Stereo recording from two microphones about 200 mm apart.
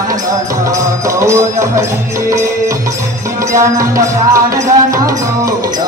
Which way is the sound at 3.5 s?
15° right (ahead or behind).